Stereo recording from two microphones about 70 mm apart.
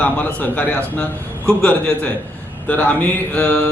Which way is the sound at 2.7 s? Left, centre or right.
Left.